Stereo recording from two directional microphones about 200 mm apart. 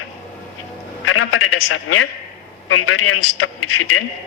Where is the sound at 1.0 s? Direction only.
90° left.